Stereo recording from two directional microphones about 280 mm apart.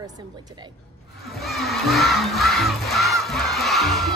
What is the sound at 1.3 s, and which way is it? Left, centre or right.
Crowd, centre.